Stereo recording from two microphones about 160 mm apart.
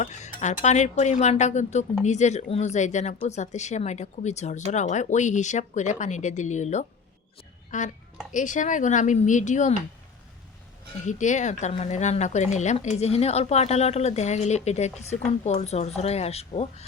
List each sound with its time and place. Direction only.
0.0 s speech: 50° left (ahead or behind)
11.0 s speech: 50° left (ahead or behind)